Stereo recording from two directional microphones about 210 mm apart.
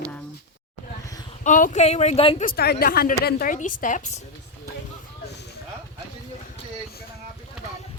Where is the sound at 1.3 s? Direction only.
40° left (ahead or behind).